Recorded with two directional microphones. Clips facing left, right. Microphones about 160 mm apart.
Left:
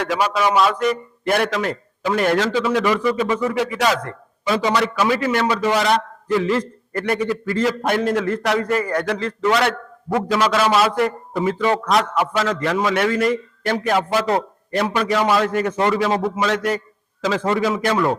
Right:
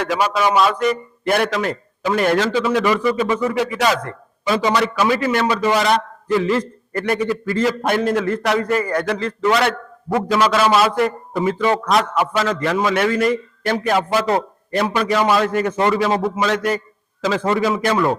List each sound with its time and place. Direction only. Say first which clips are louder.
0.0 s a man's voice: right 1 dB; 10° right (ahead or behind)